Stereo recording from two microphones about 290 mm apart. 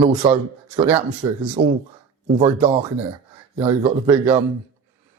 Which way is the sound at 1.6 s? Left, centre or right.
Right.